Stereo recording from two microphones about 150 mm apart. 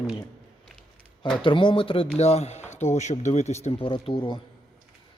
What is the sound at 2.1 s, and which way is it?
Speech, 45° left (ahead or behind).